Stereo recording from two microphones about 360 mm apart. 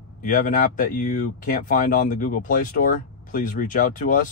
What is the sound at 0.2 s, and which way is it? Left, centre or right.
Speech, left.